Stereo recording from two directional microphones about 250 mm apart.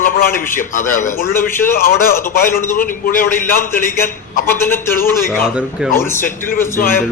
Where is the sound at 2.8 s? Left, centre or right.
Left.